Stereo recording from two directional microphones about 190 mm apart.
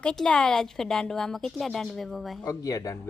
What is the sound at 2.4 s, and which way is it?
Speech, 15° left (ahead or behind).